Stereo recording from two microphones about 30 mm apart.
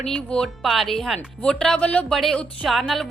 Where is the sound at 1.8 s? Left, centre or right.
Left.